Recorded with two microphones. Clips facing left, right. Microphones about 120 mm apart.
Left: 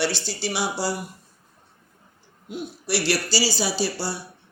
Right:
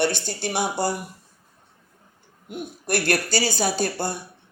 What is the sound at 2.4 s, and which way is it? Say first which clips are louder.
Speech: even; 50° right (ahead or behind).